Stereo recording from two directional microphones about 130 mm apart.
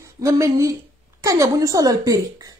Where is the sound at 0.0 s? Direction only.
25° right (ahead or behind).